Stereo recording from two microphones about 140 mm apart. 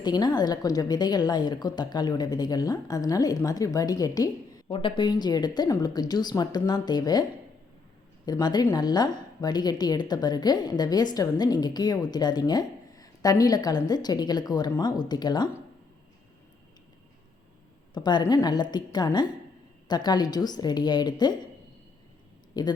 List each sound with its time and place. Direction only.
0.0 s a woman's voice: 30° left (ahead or behind)
8.3 s a woman's voice: 30° left (ahead or behind)
17.9 s a woman's voice: 30° left (ahead or behind)
22.5 s a woman's voice: 30° left (ahead or behind)